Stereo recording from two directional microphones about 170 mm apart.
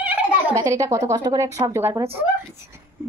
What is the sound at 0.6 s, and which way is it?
Speech, 20° right (ahead or behind).